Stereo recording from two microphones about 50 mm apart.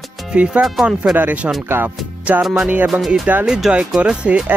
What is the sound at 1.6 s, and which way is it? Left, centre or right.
Speech, right.